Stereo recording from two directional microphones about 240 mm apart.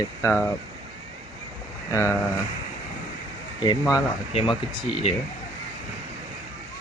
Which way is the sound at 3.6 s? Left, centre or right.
Centre.